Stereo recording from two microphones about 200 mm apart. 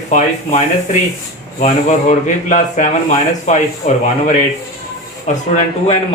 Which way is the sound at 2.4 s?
40° left (ahead or behind).